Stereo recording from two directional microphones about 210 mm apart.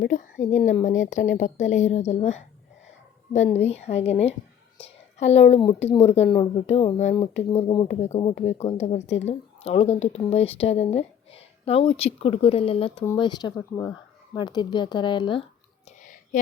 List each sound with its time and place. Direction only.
0.0 s a woman's voice: 35° left (ahead or behind)